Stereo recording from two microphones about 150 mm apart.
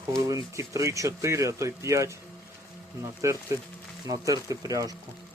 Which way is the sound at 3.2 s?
20° right (ahead or behind).